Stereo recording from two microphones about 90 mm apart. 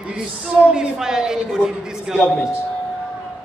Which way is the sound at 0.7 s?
5° right (ahead or behind).